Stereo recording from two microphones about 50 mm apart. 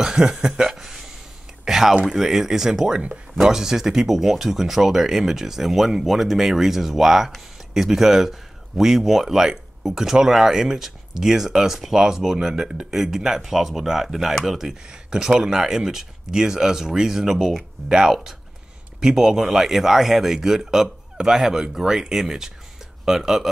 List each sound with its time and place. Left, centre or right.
0.0 s speech: centre
0.7 s a sound: centre
2.0 s speech: centre